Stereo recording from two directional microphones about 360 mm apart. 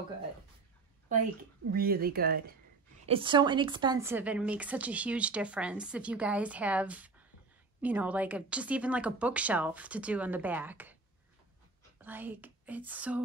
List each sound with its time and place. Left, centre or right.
1.7 s speech: right
3.1 s a woman's voice: centre
12.0 s speech: centre